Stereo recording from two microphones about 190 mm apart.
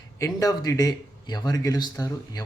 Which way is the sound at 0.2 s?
20° left (ahead or behind).